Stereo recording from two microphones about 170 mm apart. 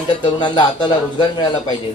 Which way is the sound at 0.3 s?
25° left (ahead or behind).